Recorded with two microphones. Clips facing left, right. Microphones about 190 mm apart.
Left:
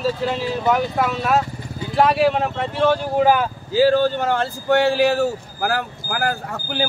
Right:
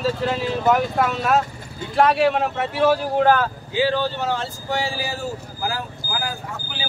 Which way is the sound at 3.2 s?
15° left (ahead or behind).